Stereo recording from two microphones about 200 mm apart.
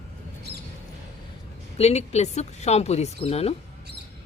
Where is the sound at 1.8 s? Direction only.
30° left (ahead or behind).